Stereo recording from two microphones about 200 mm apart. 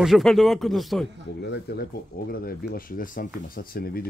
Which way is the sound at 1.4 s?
55° left (ahead or behind).